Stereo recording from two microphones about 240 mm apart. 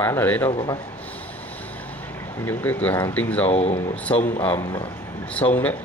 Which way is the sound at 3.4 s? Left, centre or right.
Left.